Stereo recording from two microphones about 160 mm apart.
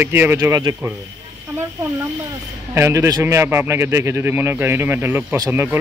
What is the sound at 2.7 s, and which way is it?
A man's voice, 15° right (ahead or behind).